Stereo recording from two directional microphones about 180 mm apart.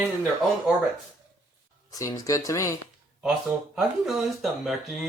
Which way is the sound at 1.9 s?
20° left (ahead or behind).